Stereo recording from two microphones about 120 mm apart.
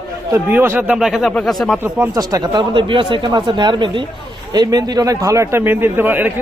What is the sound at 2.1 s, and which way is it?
Speech, 30° right (ahead or behind).